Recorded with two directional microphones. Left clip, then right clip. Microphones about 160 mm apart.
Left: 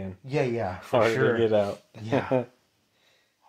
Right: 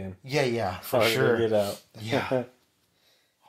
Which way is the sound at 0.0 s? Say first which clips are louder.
Right 1 dB; 5° left (ahead or behind).